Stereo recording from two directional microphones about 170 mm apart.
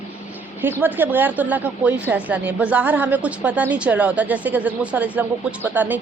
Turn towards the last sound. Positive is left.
turn(degrees=-10)  # may be behind; listen again after turning